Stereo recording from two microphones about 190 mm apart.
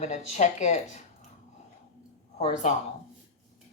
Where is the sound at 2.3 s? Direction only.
35° left (ahead or behind).